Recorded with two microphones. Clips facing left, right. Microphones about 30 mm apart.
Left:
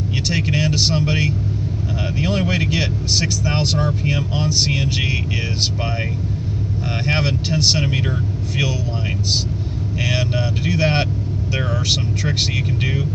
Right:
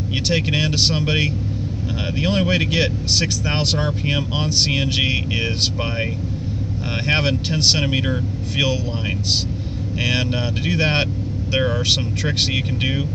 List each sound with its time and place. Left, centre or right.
0.3 s speech: right
3.5 s speech: right
4.9 s speech: right
7.1 s speech: right
9.9 s speech: centre